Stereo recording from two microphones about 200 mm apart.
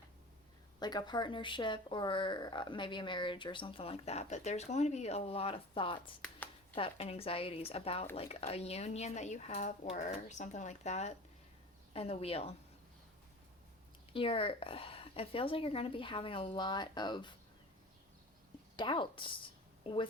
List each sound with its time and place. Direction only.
0.8 s speech: 20° left (ahead or behind)
14.1 s speech: 25° left (ahead or behind)
18.8 s speech: 25° left (ahead or behind)